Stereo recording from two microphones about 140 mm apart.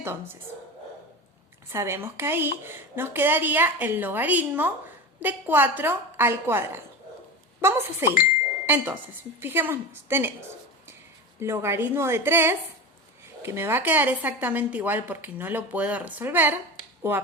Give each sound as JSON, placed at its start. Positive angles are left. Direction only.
{"t": 0.0, "sound": "a woman's voice", "side_deg": -15}
{"t": 1.7, "sound": "a woman's voice", "side_deg": -20}
{"t": 11.3, "sound": "a woman's voice", "side_deg": -20}